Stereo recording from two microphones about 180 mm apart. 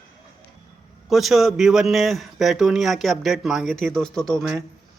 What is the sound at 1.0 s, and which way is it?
A man's voice, centre (ahead or behind).